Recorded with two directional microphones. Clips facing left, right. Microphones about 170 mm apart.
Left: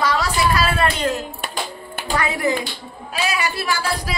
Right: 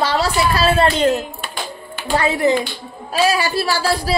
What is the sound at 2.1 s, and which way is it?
Speech, 30° right (ahead or behind).